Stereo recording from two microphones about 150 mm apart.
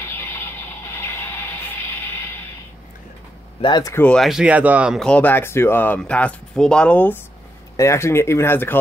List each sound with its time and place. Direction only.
0.0 s music: 15° left (ahead or behind)
3.6 s speech: 30° left (ahead or behind)
3.9 s speech: 10° left (ahead or behind); by 5.0 s 10° right (ahead or behind)
5.0 s speech: 10° left (ahead or behind)
7.7 s speech: 20° left (ahead or behind)